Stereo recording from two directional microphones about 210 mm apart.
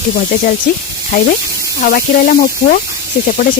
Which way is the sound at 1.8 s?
45° left (ahead or behind).